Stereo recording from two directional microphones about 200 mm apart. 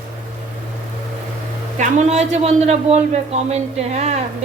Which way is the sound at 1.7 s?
35° right (ahead or behind).